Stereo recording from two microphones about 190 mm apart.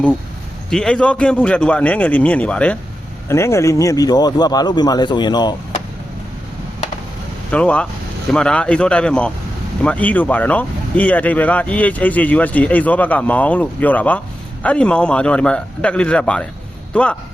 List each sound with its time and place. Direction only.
0.7 s speech: 5° left (ahead or behind); by 5.5 s 20° left (ahead or behind)
7.5 s a man's voice: 5° left (ahead or behind)